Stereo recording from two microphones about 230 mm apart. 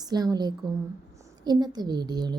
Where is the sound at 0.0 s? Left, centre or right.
Centre.